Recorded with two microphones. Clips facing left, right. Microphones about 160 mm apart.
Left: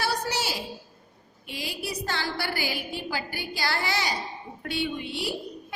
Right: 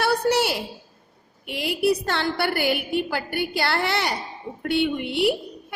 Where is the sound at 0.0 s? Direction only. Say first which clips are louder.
Right 8 dB; 60° right (ahead or behind).